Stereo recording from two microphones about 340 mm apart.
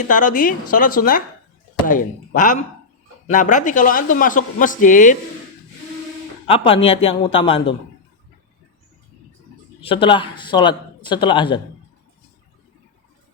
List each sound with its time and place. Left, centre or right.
0.1 s a man's voice: left
6.5 s a man's voice: centre
9.8 s a man's voice: centre